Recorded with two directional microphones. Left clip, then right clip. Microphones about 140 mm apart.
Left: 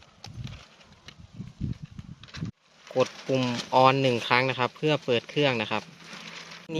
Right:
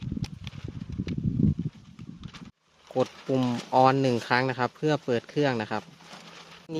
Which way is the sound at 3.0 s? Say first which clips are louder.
Left 1 dB; 40° right (ahead or behind).